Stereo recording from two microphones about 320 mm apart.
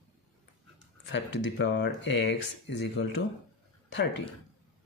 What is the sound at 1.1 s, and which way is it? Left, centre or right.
Speech, left.